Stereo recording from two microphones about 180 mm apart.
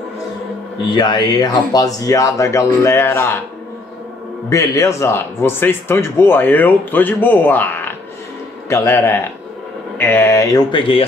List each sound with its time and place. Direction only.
0.9 s speech: 25° left (ahead or behind)
4.5 s speech: 20° left (ahead or behind)